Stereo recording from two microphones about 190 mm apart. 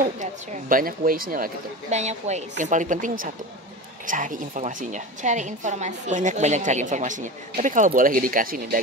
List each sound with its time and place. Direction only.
0.0 s a woman's voice: 45° right (ahead or behind)